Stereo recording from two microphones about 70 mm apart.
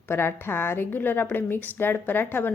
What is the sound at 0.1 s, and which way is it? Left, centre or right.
A woman's voice, left.